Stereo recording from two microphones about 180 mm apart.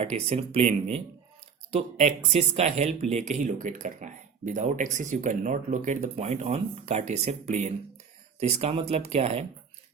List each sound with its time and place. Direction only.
0.0 s speech: 35° right (ahead or behind)